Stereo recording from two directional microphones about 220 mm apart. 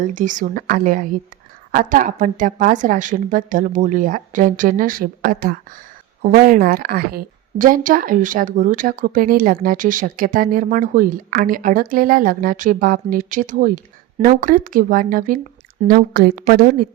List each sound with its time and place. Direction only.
0.0 s a woman's voice: 35° right (ahead or behind)